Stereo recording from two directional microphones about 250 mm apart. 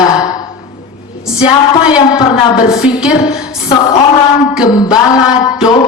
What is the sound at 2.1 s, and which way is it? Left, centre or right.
Speech, left.